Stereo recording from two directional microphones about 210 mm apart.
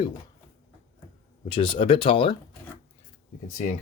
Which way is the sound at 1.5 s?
25° left (ahead or behind).